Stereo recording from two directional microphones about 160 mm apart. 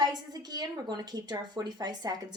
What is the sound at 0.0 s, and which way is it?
A woman's voice, 25° right (ahead or behind).